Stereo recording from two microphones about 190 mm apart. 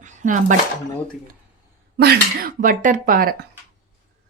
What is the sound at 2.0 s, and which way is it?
Speech, 50° right (ahead or behind).